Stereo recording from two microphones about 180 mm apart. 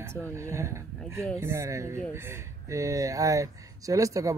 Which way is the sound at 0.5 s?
15° right (ahead or behind).